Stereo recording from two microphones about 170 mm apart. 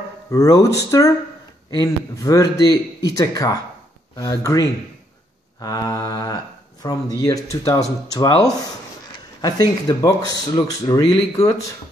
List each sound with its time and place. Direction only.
0.3 s speech: 20° left (ahead or behind)
9.4 s speech: 20° left (ahead or behind)